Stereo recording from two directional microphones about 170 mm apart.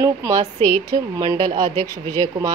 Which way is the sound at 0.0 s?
20° right (ahead or behind).